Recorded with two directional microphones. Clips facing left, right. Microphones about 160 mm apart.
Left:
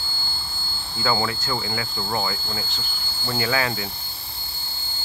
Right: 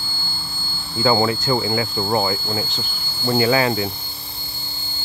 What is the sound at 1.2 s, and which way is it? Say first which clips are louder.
Speech: right 7 dB; 15° right (ahead or behind).